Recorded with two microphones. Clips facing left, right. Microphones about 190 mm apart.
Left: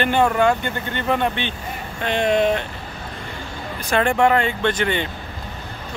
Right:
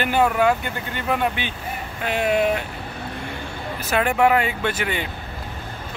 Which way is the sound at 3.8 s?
5° right (ahead or behind).